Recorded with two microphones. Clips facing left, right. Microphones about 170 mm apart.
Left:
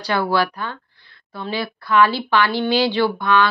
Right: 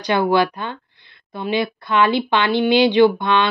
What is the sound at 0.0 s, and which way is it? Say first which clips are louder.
Speech: right 3 dB; 20° right (ahead or behind).